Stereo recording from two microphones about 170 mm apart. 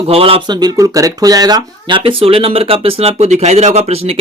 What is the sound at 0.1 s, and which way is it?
Speech, 35° right (ahead or behind).